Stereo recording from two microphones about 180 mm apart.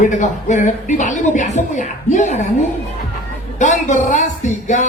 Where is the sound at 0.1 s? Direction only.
45° left (ahead or behind).